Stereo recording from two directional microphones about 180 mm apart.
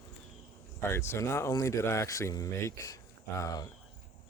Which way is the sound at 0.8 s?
15° left (ahead or behind).